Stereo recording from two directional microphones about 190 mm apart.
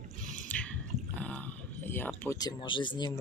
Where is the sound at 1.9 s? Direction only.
10° left (ahead or behind).